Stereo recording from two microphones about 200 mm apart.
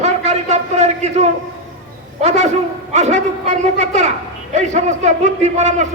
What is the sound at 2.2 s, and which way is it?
A man's voice, 35° right (ahead or behind).